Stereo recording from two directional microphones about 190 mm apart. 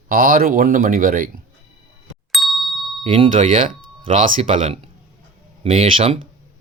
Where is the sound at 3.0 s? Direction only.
35° right (ahead or behind).